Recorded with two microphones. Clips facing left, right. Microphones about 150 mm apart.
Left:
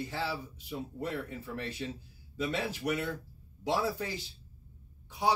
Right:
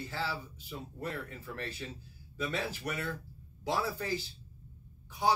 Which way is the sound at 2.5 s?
15° left (ahead or behind).